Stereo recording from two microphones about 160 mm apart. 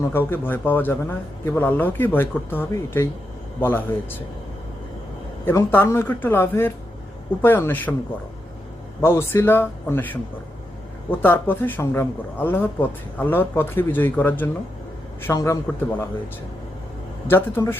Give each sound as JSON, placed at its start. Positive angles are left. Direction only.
{"t": 0.0, "sound": "a man's voice", "side_deg": 15}
{"t": 5.5, "sound": "a man's voice", "side_deg": 15}
{"t": 9.0, "sound": "a man's voice", "side_deg": 15}
{"t": 17.2, "sound": "a man's voice", "side_deg": 15}